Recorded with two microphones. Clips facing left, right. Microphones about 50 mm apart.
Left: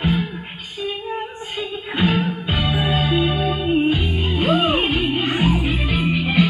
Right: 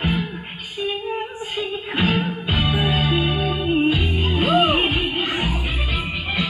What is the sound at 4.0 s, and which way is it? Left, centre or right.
Music, right.